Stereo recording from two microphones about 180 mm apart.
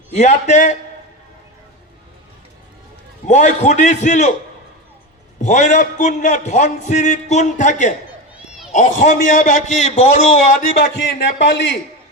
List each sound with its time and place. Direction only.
0.1 s a man's voice: 40° left (ahead or behind)
3.2 s a man's voice: 40° left (ahead or behind)
5.4 s a man's voice: 45° left (ahead or behind)
10.9 s a man's voice: 80° left